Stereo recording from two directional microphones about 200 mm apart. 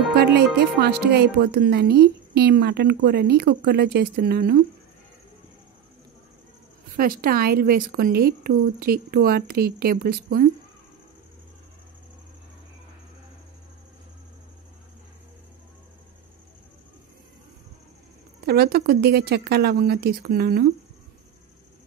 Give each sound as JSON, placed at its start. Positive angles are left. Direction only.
{"t": 0.2, "sound": "speech", "side_deg": -55}
{"t": 7.0, "sound": "a woman's voice", "side_deg": -45}
{"t": 18.4, "sound": "a woman's voice", "side_deg": -50}